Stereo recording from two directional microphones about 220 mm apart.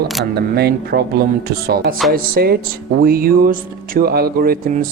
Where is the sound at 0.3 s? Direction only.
45° right (ahead or behind).